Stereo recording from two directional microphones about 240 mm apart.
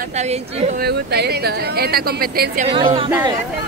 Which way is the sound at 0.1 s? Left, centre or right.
Right.